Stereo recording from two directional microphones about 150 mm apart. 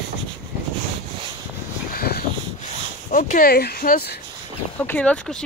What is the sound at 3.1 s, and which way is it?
Speech, 65° left (ahead or behind).